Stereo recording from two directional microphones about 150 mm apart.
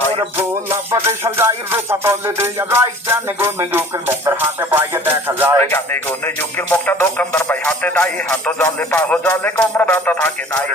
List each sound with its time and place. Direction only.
0.9 s music: 15° right (ahead or behind)
5.7 s speech: 15° left (ahead or behind)